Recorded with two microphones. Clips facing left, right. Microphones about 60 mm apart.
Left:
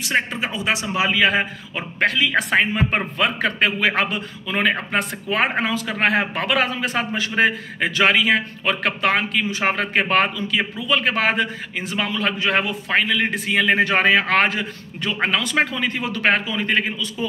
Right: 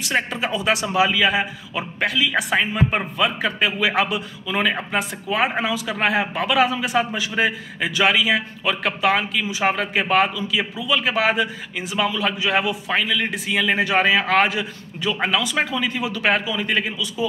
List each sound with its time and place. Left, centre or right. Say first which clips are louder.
0.0 s a man's voice: left 1 dB; left
1.1 s a man's voice: left 1 dB; left